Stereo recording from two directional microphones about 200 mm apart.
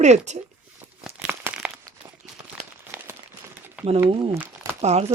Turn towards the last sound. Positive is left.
turn(degrees=-30)  # may be behind; listen again after turning